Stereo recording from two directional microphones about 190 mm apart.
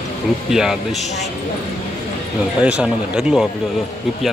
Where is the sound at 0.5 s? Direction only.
Centre (ahead or behind).